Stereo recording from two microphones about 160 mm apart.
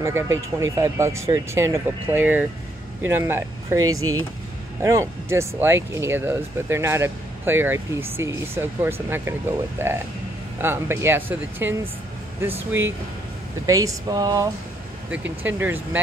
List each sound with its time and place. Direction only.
0.0 s speech: 15° right (ahead or behind)
15.0 s speech: 10° right (ahead or behind)